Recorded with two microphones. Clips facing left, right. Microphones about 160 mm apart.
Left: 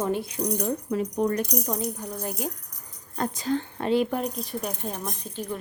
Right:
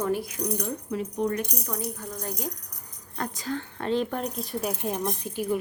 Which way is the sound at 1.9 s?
15° left (ahead or behind).